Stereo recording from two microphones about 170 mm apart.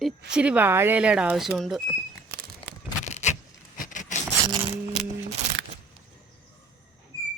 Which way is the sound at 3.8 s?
50° left (ahead or behind).